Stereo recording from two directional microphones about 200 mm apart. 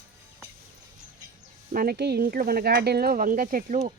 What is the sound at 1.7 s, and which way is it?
Speech, 45° right (ahead or behind).